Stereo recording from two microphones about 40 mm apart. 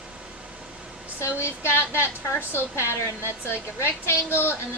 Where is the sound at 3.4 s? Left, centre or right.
Left.